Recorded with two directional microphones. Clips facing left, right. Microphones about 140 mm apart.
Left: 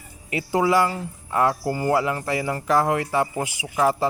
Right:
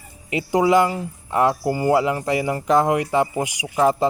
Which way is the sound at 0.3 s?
20° right (ahead or behind).